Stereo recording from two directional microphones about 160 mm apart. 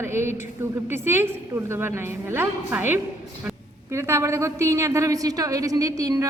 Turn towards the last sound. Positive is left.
turn(degrees=-20)  # may be behind; listen again after turning